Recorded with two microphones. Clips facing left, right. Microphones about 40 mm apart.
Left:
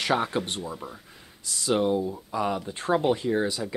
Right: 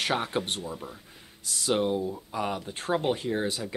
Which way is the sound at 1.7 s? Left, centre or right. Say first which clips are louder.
Left 3 dB; centre.